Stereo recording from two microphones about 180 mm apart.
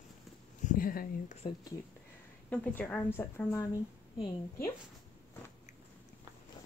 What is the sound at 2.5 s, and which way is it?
Speech, 10° left (ahead or behind).